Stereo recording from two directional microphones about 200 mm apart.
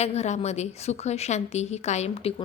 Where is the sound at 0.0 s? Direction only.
35° left (ahead or behind).